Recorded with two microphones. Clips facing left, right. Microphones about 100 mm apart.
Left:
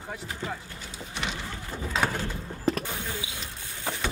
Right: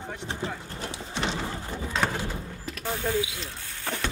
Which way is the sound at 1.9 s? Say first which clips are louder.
Even; 5° right (ahead or behind).